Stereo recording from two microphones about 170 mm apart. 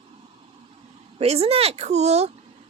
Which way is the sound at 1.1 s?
35° right (ahead or behind).